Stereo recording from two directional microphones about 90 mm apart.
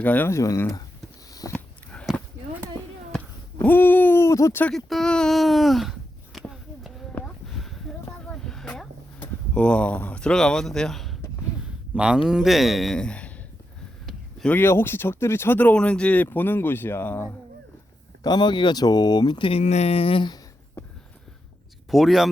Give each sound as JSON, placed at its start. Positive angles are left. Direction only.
{"t": 0.0, "sound": "speech", "side_deg": 20}
{"t": 0.3, "sound": "speech", "side_deg": 35}
{"t": 1.3, "sound": "a sound", "side_deg": 40}
{"t": 1.5, "sound": "a sound", "side_deg": 15}
{"t": 3.6, "sound": "speech", "side_deg": 20}
{"t": 4.2, "sound": "speech", "side_deg": 35}
{"t": 4.7, "sound": "speech", "side_deg": 5}
{"t": 7.4, "sound": "a sound", "side_deg": 5}
{"t": 9.2, "sound": "speech", "side_deg": 10}
{"t": 11.9, "sound": "a man's voice", "side_deg": -10}
{"t": 14.4, "sound": "speech", "side_deg": 20}
{"t": 18.2, "sound": "speech", "side_deg": 50}
{"t": 19.5, "sound": "a sound", "side_deg": 90}
{"t": 21.8, "sound": "speech", "side_deg": 0}